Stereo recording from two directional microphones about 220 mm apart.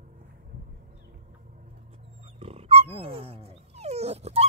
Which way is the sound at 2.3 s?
25° right (ahead or behind).